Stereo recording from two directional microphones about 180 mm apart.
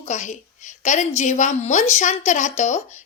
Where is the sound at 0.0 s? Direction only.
40° left (ahead or behind).